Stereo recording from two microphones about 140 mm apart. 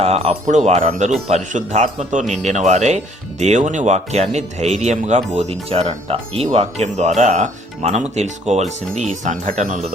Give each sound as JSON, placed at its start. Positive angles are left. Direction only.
{"t": 0.0, "sound": "speech", "side_deg": -45}
{"t": 0.4, "sound": "speech", "side_deg": -55}